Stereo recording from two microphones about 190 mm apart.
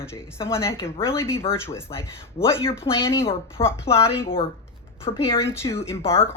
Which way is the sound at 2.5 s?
30° left (ahead or behind).